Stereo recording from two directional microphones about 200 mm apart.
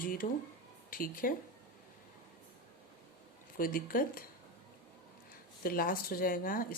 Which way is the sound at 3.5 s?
45° left (ahead or behind).